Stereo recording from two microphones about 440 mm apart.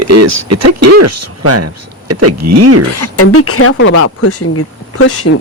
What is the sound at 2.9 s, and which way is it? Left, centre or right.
Speech, left.